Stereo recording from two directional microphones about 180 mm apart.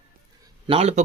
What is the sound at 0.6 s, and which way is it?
Speech, 35° right (ahead or behind).